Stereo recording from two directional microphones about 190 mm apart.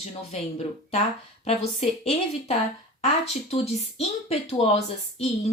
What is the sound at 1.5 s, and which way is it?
Speech, 35° left (ahead or behind).